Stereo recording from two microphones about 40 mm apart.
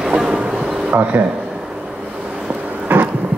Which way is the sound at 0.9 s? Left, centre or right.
Right.